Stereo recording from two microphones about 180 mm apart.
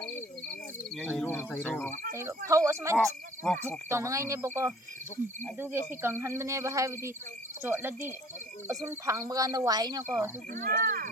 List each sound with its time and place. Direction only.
0.9 s speech: 5° left (ahead or behind)
2.1 s speech: 15° right (ahead or behind)
3.0 s speech: 5° left (ahead or behind)
3.8 s speech: 15° right (ahead or behind)
10.5 s speech: 45° right (ahead or behind)